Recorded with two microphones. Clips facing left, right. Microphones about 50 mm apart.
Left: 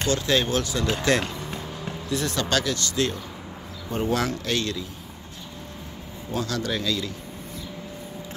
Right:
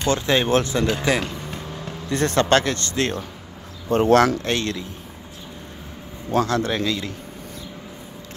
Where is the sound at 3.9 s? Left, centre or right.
Right.